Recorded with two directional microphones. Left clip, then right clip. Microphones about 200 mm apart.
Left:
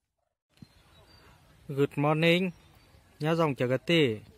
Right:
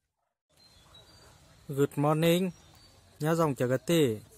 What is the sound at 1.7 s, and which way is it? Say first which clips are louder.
Speech: even; centre (ahead or behind).